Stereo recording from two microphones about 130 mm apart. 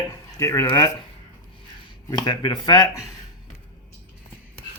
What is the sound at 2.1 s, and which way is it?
Speech, 30° left (ahead or behind).